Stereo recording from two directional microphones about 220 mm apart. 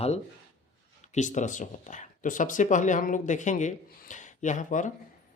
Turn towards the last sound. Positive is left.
turn(degrees=35)  # may be behind; listen again after turning